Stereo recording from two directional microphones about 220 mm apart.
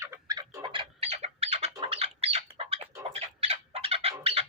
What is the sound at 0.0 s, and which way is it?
Bird, 15° right (ahead or behind).